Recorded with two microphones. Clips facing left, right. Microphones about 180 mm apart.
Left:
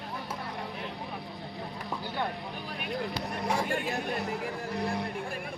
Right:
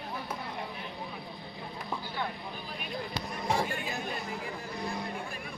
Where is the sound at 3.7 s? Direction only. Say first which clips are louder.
Left 5 dB; 65° left (ahead or behind).